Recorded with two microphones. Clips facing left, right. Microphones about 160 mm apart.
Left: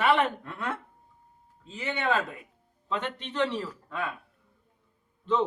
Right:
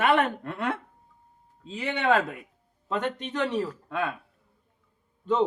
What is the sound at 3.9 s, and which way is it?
Speech, 70° right (ahead or behind).